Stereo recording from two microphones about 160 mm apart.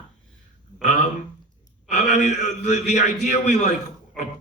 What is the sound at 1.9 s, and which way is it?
Speech, 45° left (ahead or behind).